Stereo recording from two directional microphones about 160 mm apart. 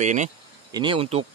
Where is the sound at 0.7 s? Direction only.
30° right (ahead or behind).